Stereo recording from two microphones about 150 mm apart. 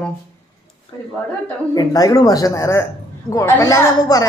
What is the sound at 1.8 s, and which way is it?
Speech, 25° left (ahead or behind).